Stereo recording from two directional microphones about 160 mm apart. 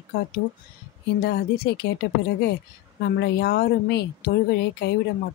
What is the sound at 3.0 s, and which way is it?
Speech, 90° left.